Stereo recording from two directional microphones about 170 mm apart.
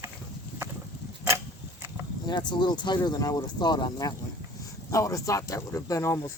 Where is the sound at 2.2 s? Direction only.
25° left (ahead or behind).